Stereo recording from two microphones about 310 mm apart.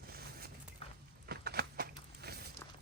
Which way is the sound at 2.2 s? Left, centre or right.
Right.